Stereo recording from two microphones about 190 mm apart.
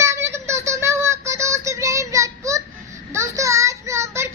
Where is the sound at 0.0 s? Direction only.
15° right (ahead or behind).